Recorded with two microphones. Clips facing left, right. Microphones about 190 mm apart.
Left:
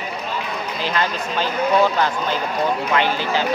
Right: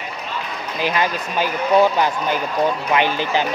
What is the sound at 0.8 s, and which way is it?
Speech, 15° right (ahead or behind).